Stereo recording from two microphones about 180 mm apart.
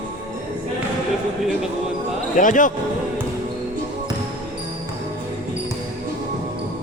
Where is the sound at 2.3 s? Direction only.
45° left (ahead or behind).